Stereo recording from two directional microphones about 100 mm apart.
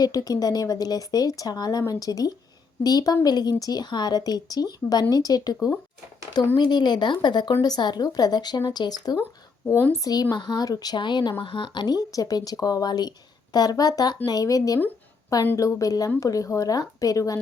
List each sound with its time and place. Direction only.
0.0 s speech: 40° left (ahead or behind)
6.6 s speech: 45° left (ahead or behind)
9.6 s speech: 20° left (ahead or behind)
10.0 s speech: 40° left (ahead or behind)